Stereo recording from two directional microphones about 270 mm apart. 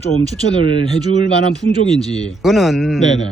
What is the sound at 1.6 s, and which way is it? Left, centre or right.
Speech, centre.